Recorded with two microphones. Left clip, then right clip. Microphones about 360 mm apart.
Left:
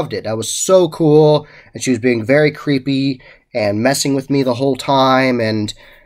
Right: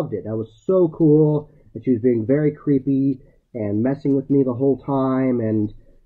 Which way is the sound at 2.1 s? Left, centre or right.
Centre.